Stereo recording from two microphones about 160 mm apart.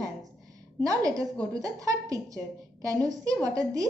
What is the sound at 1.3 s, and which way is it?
Speech, 5° left (ahead or behind).